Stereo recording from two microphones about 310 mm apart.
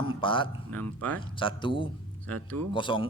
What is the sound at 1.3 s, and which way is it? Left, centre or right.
Speech, centre.